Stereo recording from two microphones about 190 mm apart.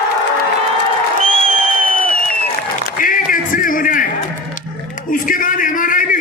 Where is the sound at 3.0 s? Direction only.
45° left (ahead or behind).